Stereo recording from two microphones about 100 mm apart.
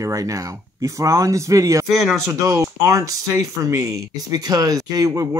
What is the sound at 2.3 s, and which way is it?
Speech, 35° right (ahead or behind).